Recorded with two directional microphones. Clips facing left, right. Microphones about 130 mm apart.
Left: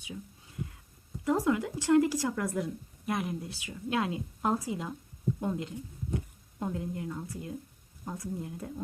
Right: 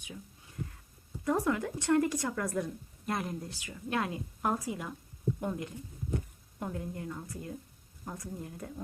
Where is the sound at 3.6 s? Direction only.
20° left (ahead or behind).